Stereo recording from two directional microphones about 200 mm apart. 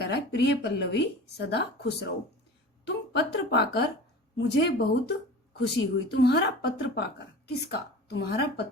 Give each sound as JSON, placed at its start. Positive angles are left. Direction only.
{"t": 0.0, "sound": "a woman's voice", "side_deg": 55}